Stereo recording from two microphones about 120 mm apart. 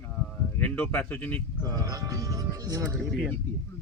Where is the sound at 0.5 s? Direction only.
15° left (ahead or behind).